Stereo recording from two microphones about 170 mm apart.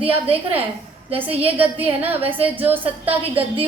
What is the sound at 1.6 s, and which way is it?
Speech, 10° right (ahead or behind).